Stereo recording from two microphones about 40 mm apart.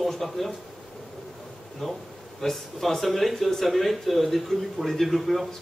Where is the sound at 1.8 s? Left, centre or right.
Centre.